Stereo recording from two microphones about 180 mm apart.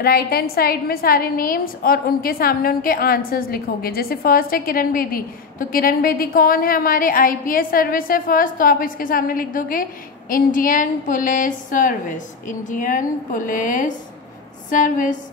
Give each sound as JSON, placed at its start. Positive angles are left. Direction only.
{"t": 0.0, "sound": "a woman's voice", "side_deg": 60}